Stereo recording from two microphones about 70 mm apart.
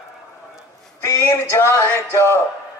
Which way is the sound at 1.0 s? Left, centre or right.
Left.